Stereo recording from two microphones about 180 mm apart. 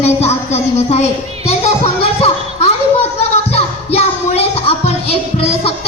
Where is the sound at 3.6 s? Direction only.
35° left (ahead or behind).